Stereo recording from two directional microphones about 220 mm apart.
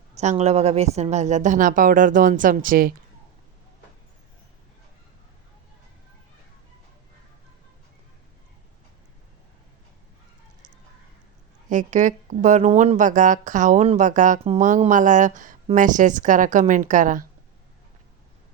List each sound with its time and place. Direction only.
0.1 s speech: 30° right (ahead or behind)
11.7 s speech: 35° right (ahead or behind)